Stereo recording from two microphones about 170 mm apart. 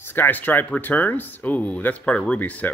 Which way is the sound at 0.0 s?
10° left (ahead or behind).